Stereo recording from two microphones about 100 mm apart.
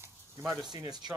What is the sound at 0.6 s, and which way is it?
Speech, 45° right (ahead or behind).